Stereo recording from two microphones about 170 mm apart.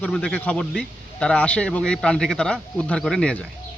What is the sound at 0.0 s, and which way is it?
Speech, 5° left (ahead or behind).